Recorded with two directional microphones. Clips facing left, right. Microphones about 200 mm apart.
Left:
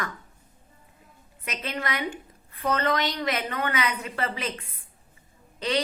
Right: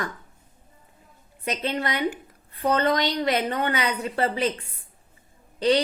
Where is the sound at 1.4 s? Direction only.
30° right (ahead or behind).